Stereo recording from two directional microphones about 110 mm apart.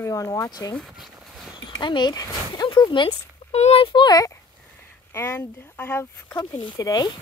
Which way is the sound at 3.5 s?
80° left.